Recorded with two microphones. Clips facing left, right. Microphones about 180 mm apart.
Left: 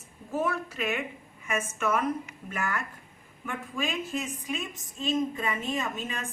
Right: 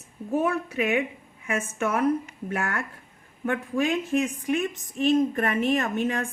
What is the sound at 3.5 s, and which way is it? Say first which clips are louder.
A woman's voice: right 8 dB; 65° right (ahead or behind).